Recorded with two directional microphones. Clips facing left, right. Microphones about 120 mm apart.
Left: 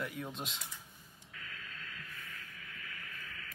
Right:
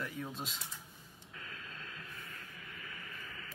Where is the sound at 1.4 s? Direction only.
30° right (ahead or behind).